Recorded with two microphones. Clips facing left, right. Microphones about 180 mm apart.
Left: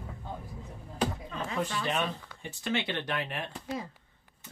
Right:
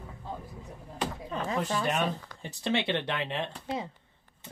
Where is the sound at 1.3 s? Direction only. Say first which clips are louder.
Right 3 dB; 40° right (ahead or behind).